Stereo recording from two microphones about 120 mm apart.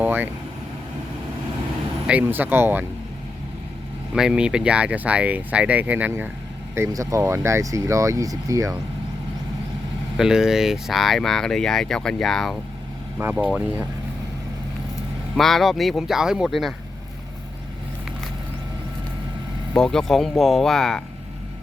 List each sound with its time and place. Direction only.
0.0 s speech: 15° right (ahead or behind)
2.0 s speech: 15° right (ahead or behind)
4.1 s speech: 5° right (ahead or behind)
6.7 s speech: 25° right (ahead or behind)
10.2 s speech: 5° right (ahead or behind)
13.2 s speech: 20° right (ahead or behind)
15.4 s speech: centre (ahead or behind)
19.7 s speech: 5° left (ahead or behind)